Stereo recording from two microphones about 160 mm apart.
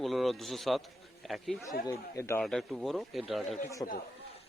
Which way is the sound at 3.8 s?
25° left (ahead or behind).